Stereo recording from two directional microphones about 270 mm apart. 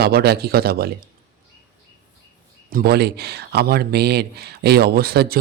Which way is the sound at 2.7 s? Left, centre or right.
Right.